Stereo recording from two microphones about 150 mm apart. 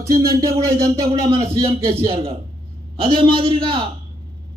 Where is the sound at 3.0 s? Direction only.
35° right (ahead or behind).